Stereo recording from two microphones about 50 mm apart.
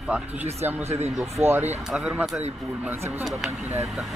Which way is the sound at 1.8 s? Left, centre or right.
Centre.